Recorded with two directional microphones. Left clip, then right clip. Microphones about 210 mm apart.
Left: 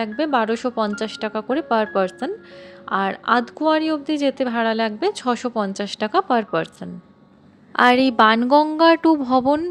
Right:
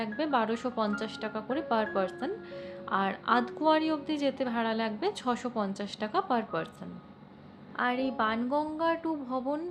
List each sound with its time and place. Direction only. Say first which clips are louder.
0.0 s speech: left 9 dB; 35° left (ahead or behind)
7.8 s a woman's voice: left 15 dB; 50° left (ahead or behind)